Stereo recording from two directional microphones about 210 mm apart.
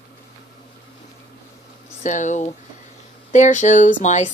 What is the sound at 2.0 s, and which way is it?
Speech, 35° left (ahead or behind).